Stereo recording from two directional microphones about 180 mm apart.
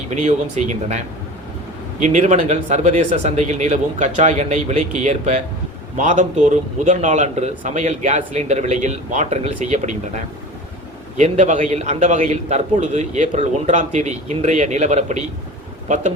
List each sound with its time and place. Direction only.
0.1 s a man's voice: 40° right (ahead or behind)
11.2 s a man's voice: 45° right (ahead or behind)